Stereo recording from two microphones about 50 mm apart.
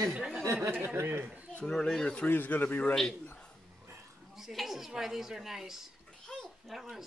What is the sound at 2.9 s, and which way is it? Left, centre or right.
Speech, centre.